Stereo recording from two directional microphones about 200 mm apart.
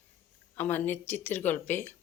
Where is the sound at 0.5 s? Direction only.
10° left (ahead or behind).